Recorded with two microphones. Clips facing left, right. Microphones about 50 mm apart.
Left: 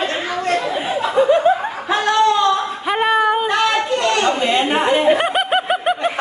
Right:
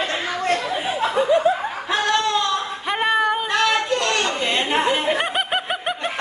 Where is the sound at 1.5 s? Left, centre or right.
Left.